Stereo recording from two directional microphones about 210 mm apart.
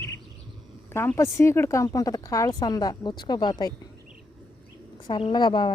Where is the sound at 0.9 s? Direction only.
10° left (ahead or behind).